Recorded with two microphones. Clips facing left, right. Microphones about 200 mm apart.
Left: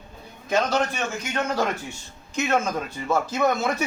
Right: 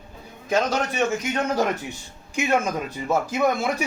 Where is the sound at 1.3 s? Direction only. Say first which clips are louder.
Right 2 dB; 15° right (ahead or behind).